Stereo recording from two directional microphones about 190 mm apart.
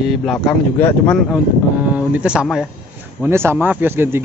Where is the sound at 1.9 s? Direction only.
5° right (ahead or behind).